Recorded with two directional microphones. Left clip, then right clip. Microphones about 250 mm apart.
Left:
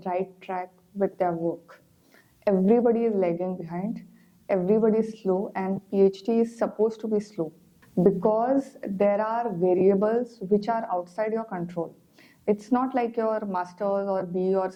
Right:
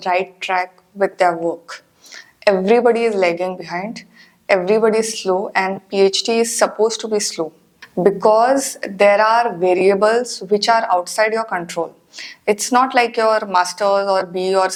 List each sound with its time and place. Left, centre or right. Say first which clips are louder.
0.0 s a woman's voice: right 11 dB; centre
5.3 s a woman's voice: right 8 dB; centre
5.5 s speech: right 8 dB; centre
8.0 s a woman's voice: right 9 dB; right
8.6 s speech: right 11 dB; centre